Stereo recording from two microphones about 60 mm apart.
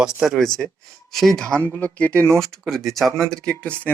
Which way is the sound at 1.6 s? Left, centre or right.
Left.